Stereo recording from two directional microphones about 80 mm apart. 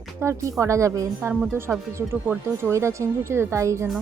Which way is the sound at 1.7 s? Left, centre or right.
Centre.